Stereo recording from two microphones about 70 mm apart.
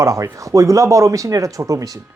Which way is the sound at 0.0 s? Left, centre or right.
Right.